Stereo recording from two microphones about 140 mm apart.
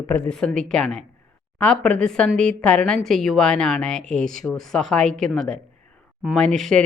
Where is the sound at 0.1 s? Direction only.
10° left (ahead or behind).